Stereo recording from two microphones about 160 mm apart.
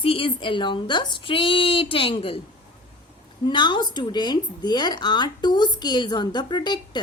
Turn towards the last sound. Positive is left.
turn(degrees=25)  # may be behind; listen again after turning